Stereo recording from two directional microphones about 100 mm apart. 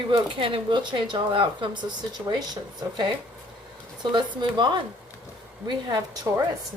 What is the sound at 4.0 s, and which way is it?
Speech, 50° right (ahead or behind).